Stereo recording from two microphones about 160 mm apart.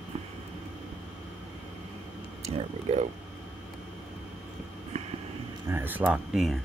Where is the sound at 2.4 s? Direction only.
40° right (ahead or behind).